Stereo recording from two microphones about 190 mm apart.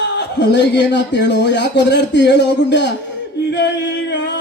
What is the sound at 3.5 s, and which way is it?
Singing, 65° left (ahead or behind).